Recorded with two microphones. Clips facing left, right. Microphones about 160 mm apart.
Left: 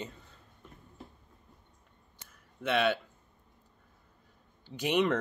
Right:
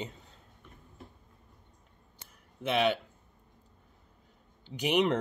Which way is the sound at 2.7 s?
15° right (ahead or behind).